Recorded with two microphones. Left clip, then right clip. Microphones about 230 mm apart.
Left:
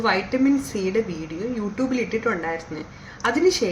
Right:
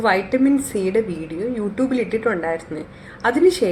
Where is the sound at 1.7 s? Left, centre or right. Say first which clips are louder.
Right 3 dB; centre.